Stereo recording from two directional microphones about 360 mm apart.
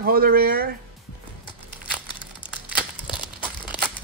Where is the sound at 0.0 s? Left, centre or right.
Right.